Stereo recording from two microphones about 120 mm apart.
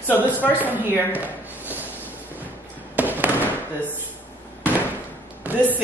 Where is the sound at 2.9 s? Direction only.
15° right (ahead or behind).